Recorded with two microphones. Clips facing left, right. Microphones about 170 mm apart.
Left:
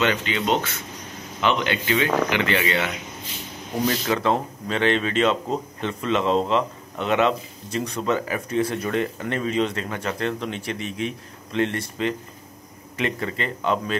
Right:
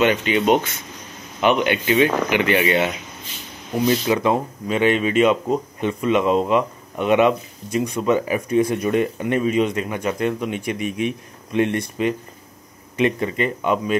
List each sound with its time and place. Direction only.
0.0 s speech: 15° right (ahead or behind)